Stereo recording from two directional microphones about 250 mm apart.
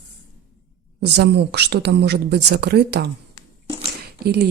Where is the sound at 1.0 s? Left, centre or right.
Right.